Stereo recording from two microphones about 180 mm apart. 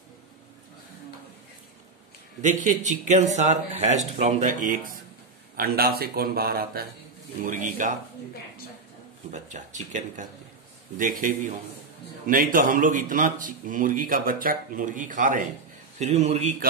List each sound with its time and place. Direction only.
2.4 s speech: 45° right (ahead or behind)
5.6 s speech: 60° right (ahead or behind)
7.4 s speech: 45° right (ahead or behind)
9.3 s speech: 40° right (ahead or behind)